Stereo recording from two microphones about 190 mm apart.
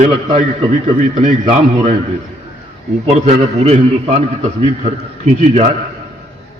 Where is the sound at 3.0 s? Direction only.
35° right (ahead or behind).